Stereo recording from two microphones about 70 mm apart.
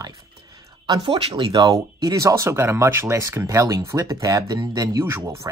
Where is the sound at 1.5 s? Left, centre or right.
Right.